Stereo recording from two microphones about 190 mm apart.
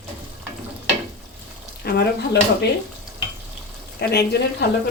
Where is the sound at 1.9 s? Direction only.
60° left (ahead or behind).